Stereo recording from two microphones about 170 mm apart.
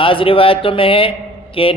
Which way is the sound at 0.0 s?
30° left (ahead or behind).